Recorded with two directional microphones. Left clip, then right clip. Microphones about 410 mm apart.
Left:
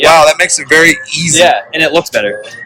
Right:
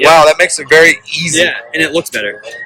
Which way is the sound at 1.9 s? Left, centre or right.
Left.